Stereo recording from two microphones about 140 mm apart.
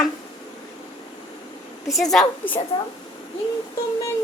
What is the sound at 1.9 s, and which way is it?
Speech, centre (ahead or behind).